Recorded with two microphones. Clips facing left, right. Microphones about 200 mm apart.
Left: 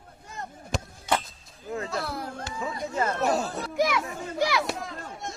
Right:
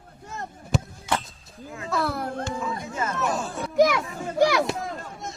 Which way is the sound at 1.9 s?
60° right (ahead or behind).